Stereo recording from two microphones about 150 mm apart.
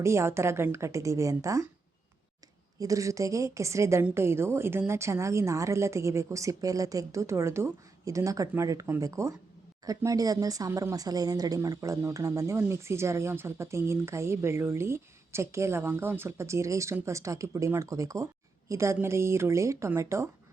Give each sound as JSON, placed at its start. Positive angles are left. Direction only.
{"t": 0.0, "sound": "speech", "side_deg": -20}
{"t": 2.7, "sound": "speech", "side_deg": -20}